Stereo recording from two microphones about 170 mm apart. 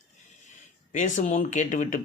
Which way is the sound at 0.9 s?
45° left (ahead or behind).